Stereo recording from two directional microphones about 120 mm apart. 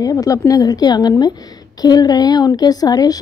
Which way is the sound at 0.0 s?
30° left (ahead or behind).